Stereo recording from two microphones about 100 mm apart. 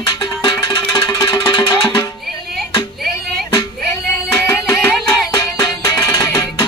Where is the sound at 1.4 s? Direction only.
50° left (ahead or behind).